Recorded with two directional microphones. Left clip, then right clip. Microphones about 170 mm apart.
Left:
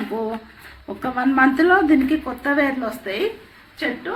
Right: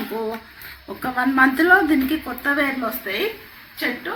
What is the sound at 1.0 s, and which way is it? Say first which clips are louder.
A woman's voice: even; 30° left (ahead or behind).